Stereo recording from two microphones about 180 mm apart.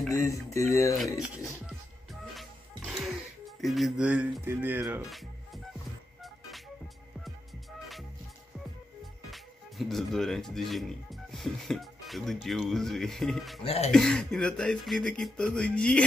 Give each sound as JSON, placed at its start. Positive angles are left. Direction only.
{"t": 0.1, "sound": "speech", "side_deg": 15}
{"t": 1.2, "sound": "speech", "side_deg": -5}
{"t": 2.3, "sound": "music", "side_deg": 0}
{"t": 5.1, "sound": "music", "side_deg": 0}
{"t": 9.3, "sound": "speech", "side_deg": 0}
{"t": 13.7, "sound": "speech", "side_deg": 35}
{"t": 13.9, "sound": "speech", "side_deg": 5}